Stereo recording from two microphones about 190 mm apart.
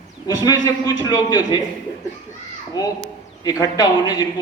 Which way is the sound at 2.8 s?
20° left (ahead or behind).